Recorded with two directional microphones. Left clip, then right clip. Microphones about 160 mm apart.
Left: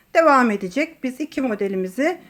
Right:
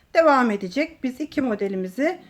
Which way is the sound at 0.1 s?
20° left (ahead or behind).